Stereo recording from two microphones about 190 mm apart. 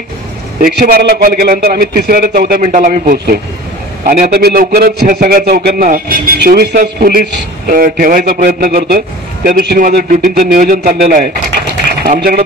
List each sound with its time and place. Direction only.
0.6 s a man's voice: 50° right (ahead or behind)